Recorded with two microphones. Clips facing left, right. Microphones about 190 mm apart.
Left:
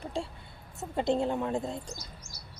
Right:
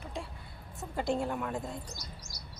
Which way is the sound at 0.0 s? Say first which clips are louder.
Left 6 dB; 30° left (ahead or behind).